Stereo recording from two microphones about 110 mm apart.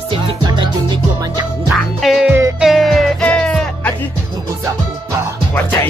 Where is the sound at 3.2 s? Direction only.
10° left (ahead or behind).